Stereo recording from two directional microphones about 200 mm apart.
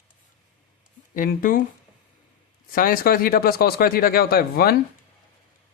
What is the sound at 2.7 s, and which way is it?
Speech, 45° left (ahead or behind).